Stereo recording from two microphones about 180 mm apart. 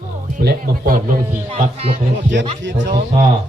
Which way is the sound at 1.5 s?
35° right (ahead or behind).